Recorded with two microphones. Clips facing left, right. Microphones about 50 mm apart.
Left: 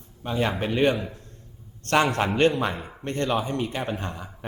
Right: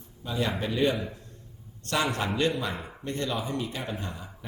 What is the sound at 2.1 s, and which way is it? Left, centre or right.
A man's voice, left.